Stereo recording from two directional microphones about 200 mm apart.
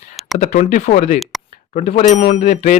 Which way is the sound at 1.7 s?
35° left (ahead or behind).